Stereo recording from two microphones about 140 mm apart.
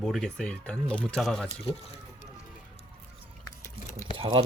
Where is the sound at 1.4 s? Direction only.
40° left (ahead or behind).